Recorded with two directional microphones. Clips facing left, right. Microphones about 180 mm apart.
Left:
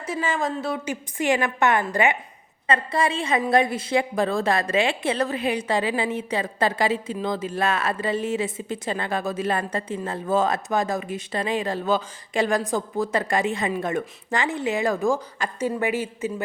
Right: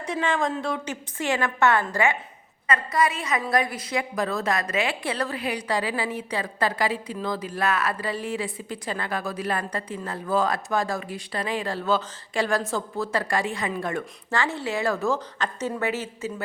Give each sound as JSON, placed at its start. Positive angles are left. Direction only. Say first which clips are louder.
{"t": 0.0, "sound": "speech", "louder": "even", "side_deg": 5}
{"t": 1.2, "sound": "a woman's voice", "louder": "left 2 dB", "side_deg": 15}